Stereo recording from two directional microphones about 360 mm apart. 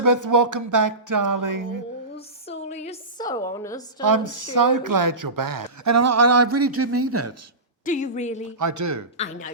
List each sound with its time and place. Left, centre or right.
0.0 s music: right
2.1 s a sound: centre
4.0 s a woman's voice: right
7.9 s a woman's voice: left
8.5 s a woman's voice: right
9.1 s a woman's voice: centre